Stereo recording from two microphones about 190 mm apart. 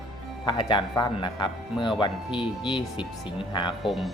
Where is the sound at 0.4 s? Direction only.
25° left (ahead or behind).